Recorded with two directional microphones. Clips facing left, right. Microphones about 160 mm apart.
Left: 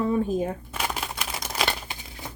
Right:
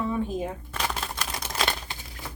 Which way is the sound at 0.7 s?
10° left (ahead or behind).